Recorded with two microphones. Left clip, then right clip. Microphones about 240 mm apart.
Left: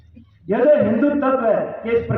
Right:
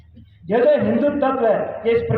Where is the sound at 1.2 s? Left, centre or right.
Right.